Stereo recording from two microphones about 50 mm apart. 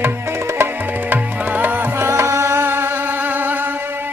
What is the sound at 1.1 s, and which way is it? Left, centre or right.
Music, right.